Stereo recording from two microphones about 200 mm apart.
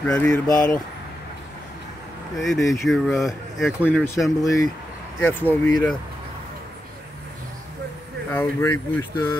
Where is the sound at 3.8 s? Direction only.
10° left (ahead or behind).